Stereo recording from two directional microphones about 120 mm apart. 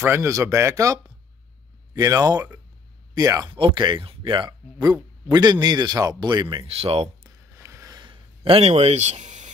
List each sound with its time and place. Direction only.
0.0 s speech: 20° right (ahead or behind)
2.0 s a man's voice: 30° right (ahead or behind)
3.5 s a man's voice: 45° right (ahead or behind)
6.7 s speech: 55° right (ahead or behind)
7.5 s a sound: 25° right (ahead or behind); by 9.5 s 75° right (ahead or behind)